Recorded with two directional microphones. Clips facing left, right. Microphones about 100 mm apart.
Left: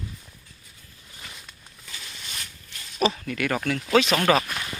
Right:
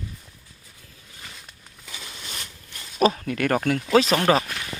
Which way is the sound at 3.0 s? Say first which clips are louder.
Right 4 dB; 45° right (ahead or behind).